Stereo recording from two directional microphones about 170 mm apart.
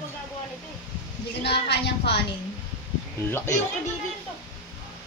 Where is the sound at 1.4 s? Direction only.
80° left.